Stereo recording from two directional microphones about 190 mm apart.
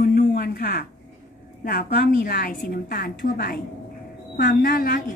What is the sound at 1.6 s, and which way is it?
A woman's voice, 55° left (ahead or behind).